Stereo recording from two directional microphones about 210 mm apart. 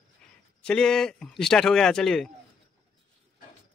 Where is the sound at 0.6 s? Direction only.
5° left (ahead or behind).